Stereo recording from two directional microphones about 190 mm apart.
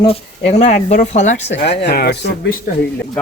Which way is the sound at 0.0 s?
30° left (ahead or behind).